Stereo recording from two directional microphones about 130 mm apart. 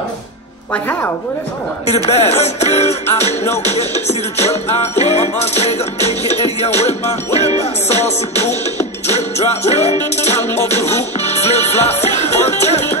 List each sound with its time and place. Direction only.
1.9 s music: 60° left (ahead or behind)
5.0 s music: 60° left (ahead or behind)
6.2 s music: 30° right (ahead or behind)
6.6 s music: 55° left (ahead or behind)